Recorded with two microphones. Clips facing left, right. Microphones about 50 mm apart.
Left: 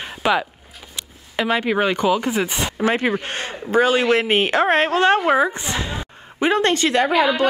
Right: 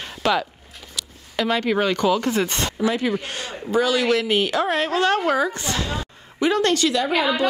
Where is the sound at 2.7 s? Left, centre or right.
Left.